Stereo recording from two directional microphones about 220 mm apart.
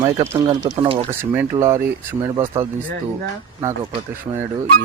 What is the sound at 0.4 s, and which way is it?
Speech, 25° right (ahead or behind).